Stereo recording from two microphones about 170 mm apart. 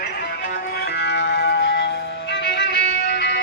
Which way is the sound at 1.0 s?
85° left.